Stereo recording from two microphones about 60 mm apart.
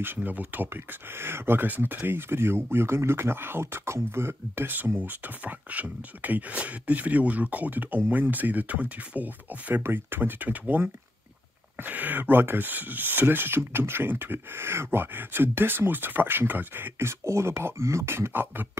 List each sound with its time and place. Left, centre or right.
0.0 s speech: right
1.1 s speech: right
9.8 s speech: right
17.2 s speech: right